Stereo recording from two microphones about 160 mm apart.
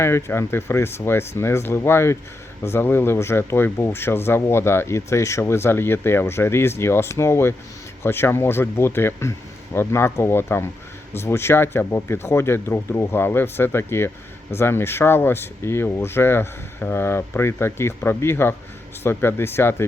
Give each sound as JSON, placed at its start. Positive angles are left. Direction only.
{"t": 0.0, "sound": "speech", "side_deg": 15}